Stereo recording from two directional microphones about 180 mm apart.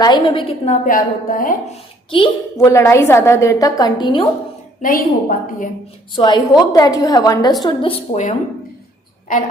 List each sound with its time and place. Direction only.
0.0 s a woman's voice: 25° left (ahead or behind)
0.9 s a woman's voice: 50° left (ahead or behind)
2.0 s a child's voice: 30° left (ahead or behind)
2.6 s a woman's voice: 20° left (ahead or behind)
4.8 s a woman's voice: 50° left (ahead or behind)
6.1 s a woman's voice: 25° left (ahead or behind)
9.3 s a woman's voice: 50° left (ahead or behind)